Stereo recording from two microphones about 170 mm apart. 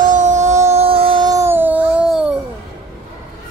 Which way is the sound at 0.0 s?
45° right (ahead or behind).